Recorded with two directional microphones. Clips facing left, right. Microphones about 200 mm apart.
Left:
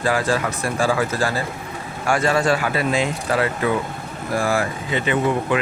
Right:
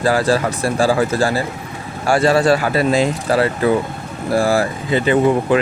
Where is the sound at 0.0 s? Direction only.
35° right (ahead or behind).